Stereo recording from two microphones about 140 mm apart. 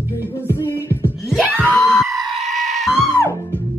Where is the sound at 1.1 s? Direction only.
Centre (ahead or behind).